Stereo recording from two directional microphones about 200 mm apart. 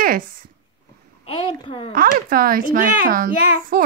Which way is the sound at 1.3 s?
25° left (ahead or behind).